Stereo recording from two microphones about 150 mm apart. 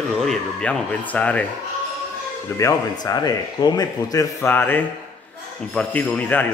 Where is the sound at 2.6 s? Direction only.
20° left (ahead or behind).